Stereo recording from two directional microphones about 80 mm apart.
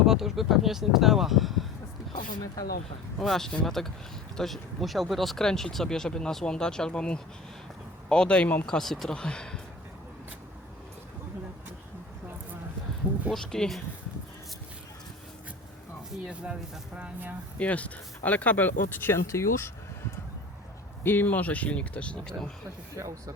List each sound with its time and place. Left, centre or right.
0.0 s speech: centre
3.2 s speech: centre
8.6 s speech: centre
13.3 s speech: centre
16.2 s speech: centre
17.6 s speech: centre; by 19.7 s left
21.0 s speech: left
23.0 s speech: right